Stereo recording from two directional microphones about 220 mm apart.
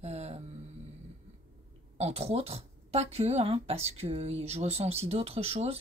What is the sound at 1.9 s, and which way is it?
Speech, 30° right (ahead or behind).